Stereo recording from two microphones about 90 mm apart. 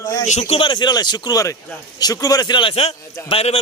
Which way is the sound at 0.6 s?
60° left (ahead or behind).